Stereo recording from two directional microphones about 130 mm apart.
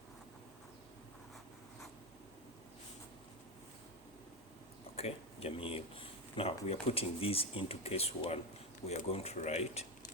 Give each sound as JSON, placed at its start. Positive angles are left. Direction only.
{"t": 4.9, "sound": "speech", "side_deg": 50}